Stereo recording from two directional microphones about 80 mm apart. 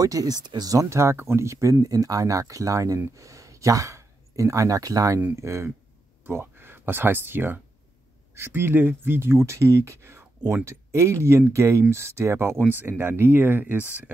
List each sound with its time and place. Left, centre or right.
0.0 s speech: right
5.3 s speech: right